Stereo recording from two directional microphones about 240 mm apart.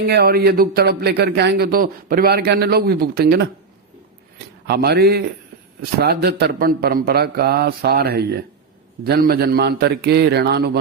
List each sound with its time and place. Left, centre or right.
0.1 s a man's voice: right
4.6 s a man's voice: right